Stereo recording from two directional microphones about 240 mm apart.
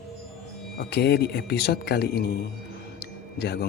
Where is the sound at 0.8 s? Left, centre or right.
Left.